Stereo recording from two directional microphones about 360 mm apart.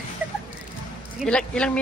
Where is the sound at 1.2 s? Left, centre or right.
Centre.